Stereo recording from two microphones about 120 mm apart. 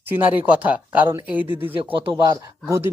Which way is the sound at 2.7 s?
25° right (ahead or behind).